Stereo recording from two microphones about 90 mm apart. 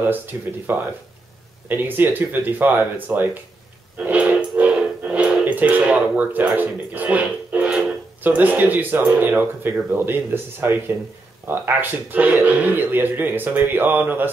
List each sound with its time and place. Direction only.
0.0 s speech: 20° right (ahead or behind)
4.0 s music: 15° right (ahead or behind)
8.2 s speech: 20° right (ahead or behind)